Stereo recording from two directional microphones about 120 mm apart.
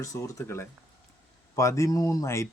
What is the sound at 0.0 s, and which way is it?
Speech, 25° left (ahead or behind).